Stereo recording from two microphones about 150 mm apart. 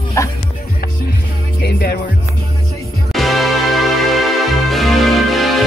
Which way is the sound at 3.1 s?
Centre (ahead or behind).